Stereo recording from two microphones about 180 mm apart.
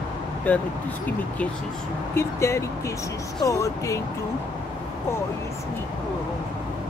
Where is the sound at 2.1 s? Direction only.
15° left (ahead or behind).